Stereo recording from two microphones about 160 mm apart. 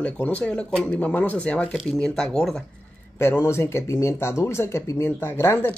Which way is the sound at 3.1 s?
15° left (ahead or behind).